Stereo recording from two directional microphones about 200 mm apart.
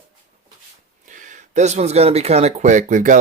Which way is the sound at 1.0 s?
40° right (ahead or behind).